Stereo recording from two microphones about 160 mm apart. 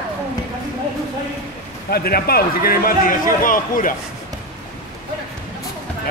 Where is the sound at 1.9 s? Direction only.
70° left (ahead or behind).